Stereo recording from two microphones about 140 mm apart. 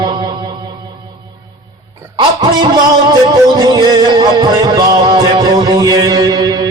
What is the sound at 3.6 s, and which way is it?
Music, 30° right (ahead or behind).